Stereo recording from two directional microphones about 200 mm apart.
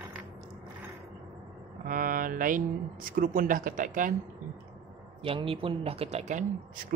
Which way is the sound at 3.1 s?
45° right (ahead or behind).